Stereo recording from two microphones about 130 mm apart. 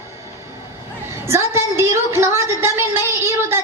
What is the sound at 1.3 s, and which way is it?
A woman's voice, 20° right (ahead or behind).